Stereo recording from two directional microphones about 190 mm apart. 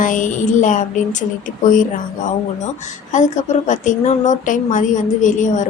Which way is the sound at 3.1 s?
40° left (ahead or behind).